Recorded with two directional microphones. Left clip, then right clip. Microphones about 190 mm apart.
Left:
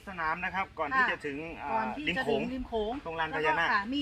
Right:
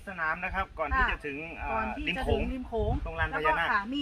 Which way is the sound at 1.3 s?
20° right (ahead or behind).